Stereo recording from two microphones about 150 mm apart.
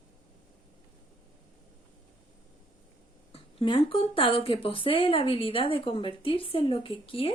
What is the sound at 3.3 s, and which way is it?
A woman's voice, 40° left (ahead or behind).